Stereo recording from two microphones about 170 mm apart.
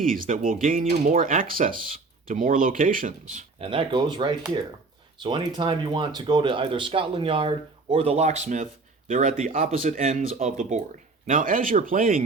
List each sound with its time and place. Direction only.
0.0 s speech: 55° right (ahead or behind)
3.6 s speech: 30° right (ahead or behind); by 12.2 s 55° right (ahead or behind)